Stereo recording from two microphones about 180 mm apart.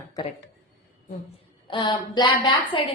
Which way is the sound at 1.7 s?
25° left (ahead or behind).